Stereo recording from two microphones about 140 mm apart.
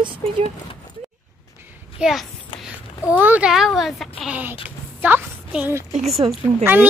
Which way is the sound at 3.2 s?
10° right (ahead or behind).